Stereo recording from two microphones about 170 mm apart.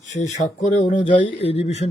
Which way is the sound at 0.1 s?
40° left (ahead or behind).